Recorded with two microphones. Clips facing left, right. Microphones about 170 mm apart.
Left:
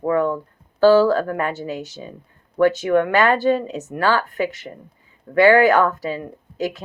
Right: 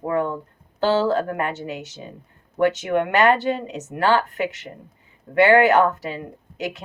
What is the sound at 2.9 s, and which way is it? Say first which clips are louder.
Speech: left 1 dB; 20° right (ahead or behind).